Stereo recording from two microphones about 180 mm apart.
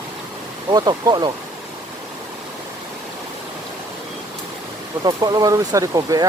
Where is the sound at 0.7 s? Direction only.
20° right (ahead or behind).